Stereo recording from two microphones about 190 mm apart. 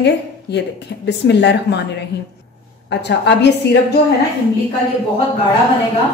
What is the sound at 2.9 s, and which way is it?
Speech, 65° left (ahead or behind).